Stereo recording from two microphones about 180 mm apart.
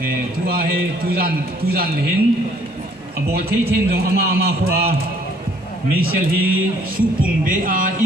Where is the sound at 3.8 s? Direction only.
60° right (ahead or behind).